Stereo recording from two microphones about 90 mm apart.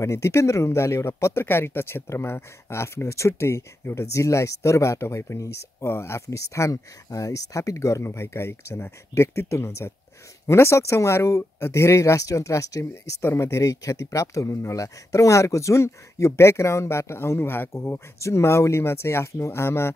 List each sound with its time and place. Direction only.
0.0 s speech: 30° left (ahead or behind)